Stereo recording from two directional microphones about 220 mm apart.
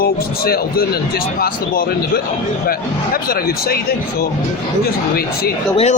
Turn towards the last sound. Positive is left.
turn(degrees=30)  # may be behind; listen again after turning